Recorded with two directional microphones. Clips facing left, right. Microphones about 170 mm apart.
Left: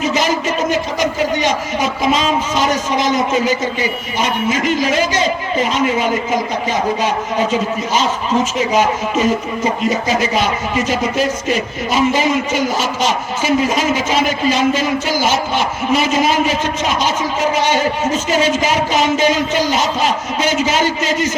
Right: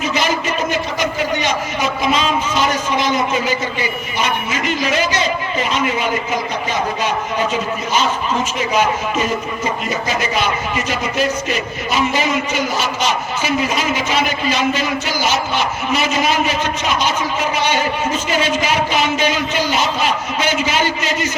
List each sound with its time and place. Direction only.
0.0 s a man's voice: 40° left (ahead or behind)
8.7 s speech: 40° left (ahead or behind)
10.3 s a man's voice: 40° left (ahead or behind)